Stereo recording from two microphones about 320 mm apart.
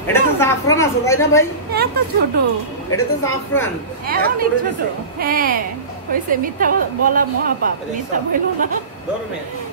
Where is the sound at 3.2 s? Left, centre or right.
Centre.